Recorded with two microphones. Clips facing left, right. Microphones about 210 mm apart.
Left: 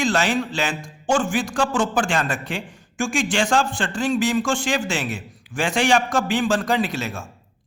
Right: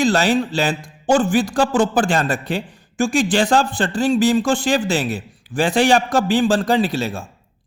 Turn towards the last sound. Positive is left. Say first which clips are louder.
# right 4 dB
turn(degrees=-35)  # may be behind; listen again after turning